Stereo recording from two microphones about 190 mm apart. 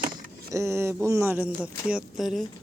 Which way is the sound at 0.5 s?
15° right (ahead or behind).